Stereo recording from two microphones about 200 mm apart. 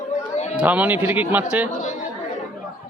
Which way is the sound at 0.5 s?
5° right (ahead or behind).